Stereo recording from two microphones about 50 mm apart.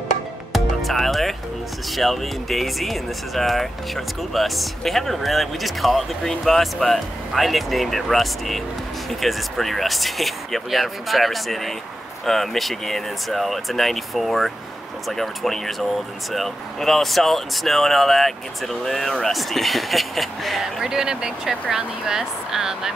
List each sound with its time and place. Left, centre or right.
0.5 s music: centre
1.9 s speech: centre